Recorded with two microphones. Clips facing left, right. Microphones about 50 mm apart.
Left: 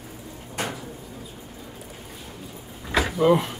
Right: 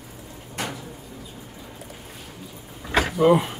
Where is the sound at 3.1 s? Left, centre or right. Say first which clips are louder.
Right 2 dB; centre.